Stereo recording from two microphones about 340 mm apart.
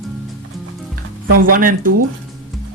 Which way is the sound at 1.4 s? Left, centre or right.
Right.